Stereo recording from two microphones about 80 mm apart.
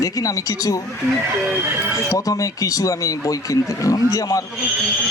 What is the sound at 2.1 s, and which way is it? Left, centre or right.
Speech, left.